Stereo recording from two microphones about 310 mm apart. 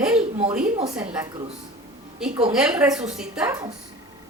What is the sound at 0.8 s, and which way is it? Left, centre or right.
Speech, centre.